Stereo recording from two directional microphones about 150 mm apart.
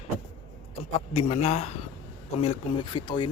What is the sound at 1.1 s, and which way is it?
Speech, 45° left (ahead or behind).